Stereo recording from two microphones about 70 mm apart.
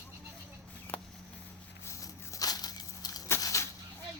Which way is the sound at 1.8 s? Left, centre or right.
Left.